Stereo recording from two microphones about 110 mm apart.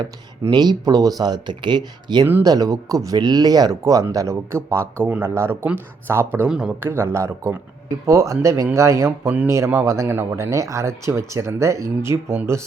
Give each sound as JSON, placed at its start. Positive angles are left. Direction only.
{"t": 0.5, "sound": "speech", "side_deg": -40}
{"t": 6.5, "sound": "a man's voice", "side_deg": -5}
{"t": 6.7, "sound": "speech", "side_deg": -20}